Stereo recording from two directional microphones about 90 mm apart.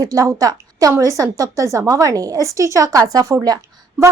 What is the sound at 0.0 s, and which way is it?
A woman's voice, 40° right (ahead or behind).